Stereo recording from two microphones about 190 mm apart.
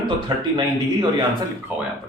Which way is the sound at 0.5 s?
20° right (ahead or behind).